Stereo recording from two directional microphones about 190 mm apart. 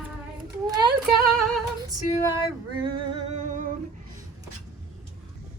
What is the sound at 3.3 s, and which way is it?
Humming, 40° right (ahead or behind).